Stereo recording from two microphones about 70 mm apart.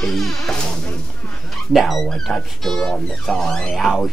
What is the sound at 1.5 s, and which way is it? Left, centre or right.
Speech, centre.